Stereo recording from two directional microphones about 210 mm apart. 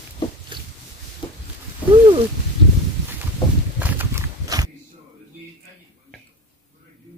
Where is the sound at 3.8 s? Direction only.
10° right (ahead or behind).